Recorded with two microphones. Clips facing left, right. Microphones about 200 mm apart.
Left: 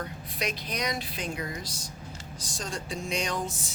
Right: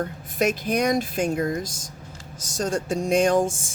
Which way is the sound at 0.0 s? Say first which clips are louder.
Right 10 dB; 50° right (ahead or behind).